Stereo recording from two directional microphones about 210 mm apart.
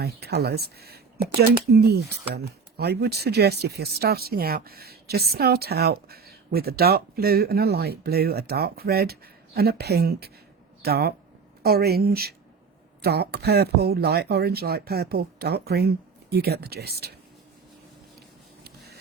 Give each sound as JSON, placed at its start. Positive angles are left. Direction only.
{"t": 0.0, "sound": "speech", "side_deg": -50}